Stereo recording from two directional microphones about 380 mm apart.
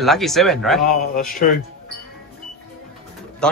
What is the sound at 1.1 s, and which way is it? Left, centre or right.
Speech, left.